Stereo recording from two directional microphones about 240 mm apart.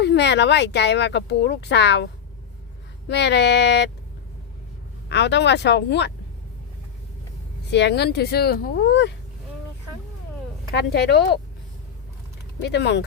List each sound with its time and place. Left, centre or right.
0.0 s speech: left
3.1 s speech: left
5.0 s speech: left
7.7 s speech: left
10.7 s speech: left
12.6 s speech: left